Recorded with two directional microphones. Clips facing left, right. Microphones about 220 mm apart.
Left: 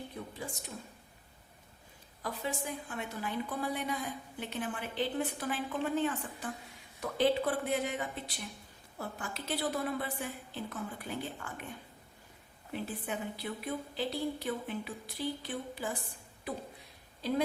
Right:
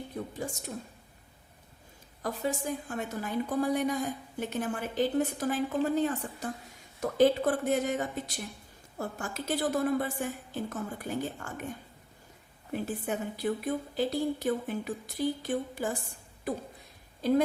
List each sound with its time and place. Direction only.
0.1 s a woman's voice: 45° right (ahead or behind)
2.2 s a woman's voice: 45° right (ahead or behind)
12.7 s a woman's voice: 45° right (ahead or behind)